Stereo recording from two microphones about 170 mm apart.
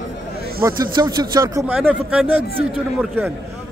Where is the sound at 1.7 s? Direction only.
10° right (ahead or behind).